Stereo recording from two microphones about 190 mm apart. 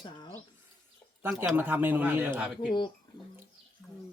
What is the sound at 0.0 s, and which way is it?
Bird, 20° left (ahead or behind).